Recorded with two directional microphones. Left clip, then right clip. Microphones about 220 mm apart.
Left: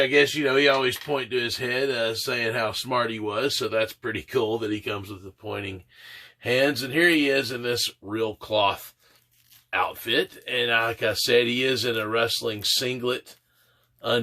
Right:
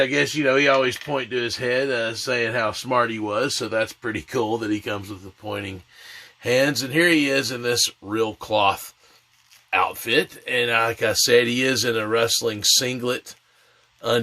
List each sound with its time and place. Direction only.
0.0 s speech: 50° right (ahead or behind)